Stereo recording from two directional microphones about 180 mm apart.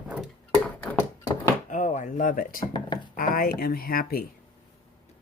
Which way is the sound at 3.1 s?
55° left (ahead or behind).